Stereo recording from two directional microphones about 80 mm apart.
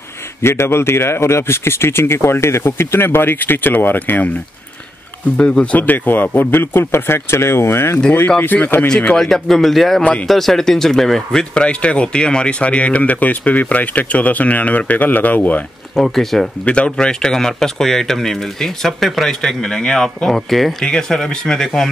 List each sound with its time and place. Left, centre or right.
0.4 s speech: left
5.4 s a man's voice: centre
8.8 s speech: centre
16.0 s speech: centre
16.6 s speech: centre